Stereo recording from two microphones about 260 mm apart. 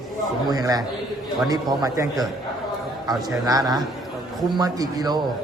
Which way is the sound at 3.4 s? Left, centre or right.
Centre.